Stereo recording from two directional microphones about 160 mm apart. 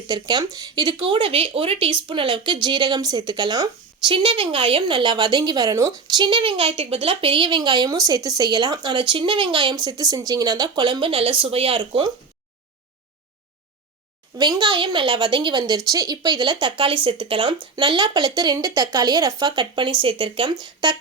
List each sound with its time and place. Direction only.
0.1 s speech: 25° right (ahead or behind)
14.3 s speech: 25° right (ahead or behind)